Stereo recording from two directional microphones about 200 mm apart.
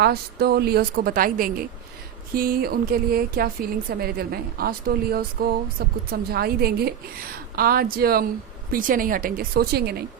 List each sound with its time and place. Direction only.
0.0 s a woman's voice: 50° right (ahead or behind)